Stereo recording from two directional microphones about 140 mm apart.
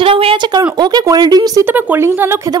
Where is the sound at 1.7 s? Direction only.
15° right (ahead or behind).